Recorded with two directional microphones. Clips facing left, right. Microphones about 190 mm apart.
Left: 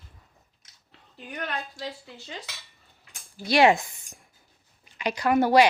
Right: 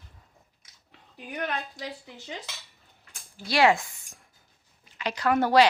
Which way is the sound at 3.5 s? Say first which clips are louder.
Left 2 dB; 20° left (ahead or behind).